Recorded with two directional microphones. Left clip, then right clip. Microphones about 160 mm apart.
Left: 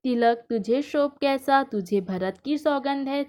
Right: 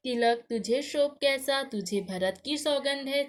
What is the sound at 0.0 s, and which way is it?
Speech, 50° left (ahead or behind).